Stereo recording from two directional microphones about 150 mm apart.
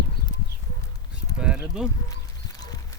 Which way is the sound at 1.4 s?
5° right (ahead or behind).